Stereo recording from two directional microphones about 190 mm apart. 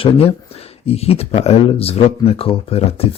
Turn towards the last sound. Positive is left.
turn(degrees=30)  # may be behind; listen again after turning